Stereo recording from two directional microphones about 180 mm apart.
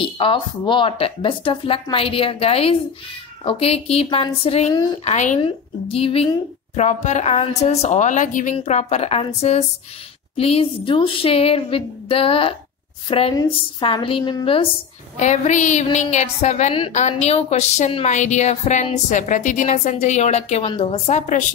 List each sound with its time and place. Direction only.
0.0 s a woman's voice: 30° left (ahead or behind)
15.1 s a woman's voice: 40° left (ahead or behind)